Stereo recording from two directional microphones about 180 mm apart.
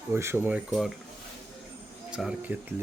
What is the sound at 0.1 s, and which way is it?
Speech, 15° right (ahead or behind).